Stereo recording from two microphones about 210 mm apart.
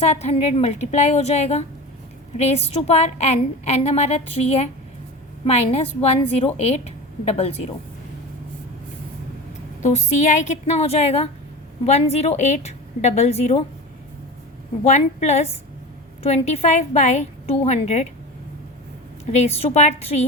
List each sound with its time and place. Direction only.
0.0 s a woman's voice: 30° left (ahead or behind)
9.8 s a woman's voice: 35° left (ahead or behind)
14.8 s a woman's voice: 35° left (ahead or behind)
19.5 s a woman's voice: 30° left (ahead or behind)